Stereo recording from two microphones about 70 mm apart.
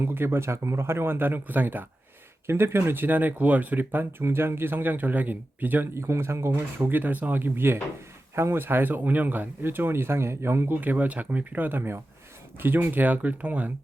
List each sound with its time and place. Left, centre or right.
0.0 s speech: right
10.8 s speech: right